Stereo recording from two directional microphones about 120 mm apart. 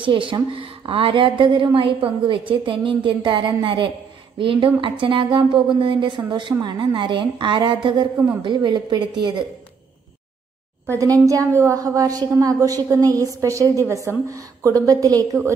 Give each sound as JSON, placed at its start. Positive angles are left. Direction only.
{"t": 0.0, "sound": "a woman's voice", "side_deg": -45}
{"t": 11.0, "sound": "a woman's voice", "side_deg": -30}